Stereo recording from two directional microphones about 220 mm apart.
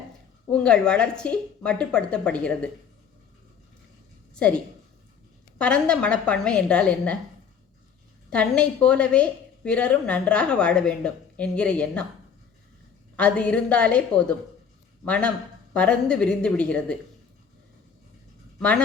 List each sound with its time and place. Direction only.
0.5 s a woman's voice: 5° left (ahead or behind)
4.4 s a woman's voice: 5° left (ahead or behind)
8.3 s a woman's voice: 5° left (ahead or behind)
13.1 s a woman's voice: 5° left (ahead or behind)